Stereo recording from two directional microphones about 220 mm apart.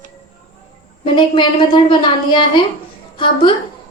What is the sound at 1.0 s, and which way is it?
A woman's voice, 20° left (ahead or behind).